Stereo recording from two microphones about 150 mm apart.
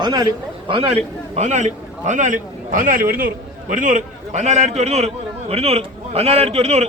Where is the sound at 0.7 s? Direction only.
35° right (ahead or behind).